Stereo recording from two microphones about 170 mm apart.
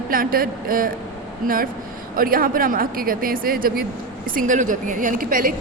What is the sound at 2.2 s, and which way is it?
A woman's voice, 55° right (ahead or behind).